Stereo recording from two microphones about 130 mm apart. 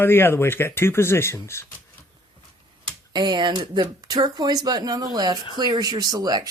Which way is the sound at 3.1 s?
35° right (ahead or behind).